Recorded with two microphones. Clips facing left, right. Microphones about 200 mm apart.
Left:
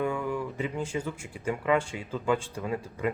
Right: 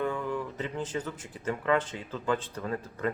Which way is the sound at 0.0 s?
10° left (ahead or behind).